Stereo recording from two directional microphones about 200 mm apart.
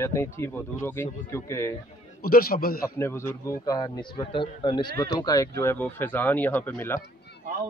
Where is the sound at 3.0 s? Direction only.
15° left (ahead or behind).